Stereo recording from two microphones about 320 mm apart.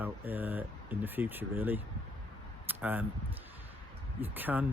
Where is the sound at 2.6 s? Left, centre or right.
Centre.